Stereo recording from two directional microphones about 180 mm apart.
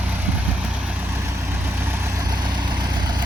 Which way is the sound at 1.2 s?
15° right (ahead or behind).